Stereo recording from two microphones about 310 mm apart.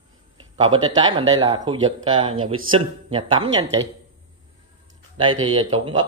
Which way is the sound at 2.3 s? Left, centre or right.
Right.